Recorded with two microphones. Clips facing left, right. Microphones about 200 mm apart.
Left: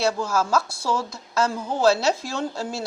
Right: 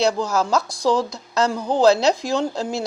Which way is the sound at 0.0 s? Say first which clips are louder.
Right 3 dB; 20° right (ahead or behind).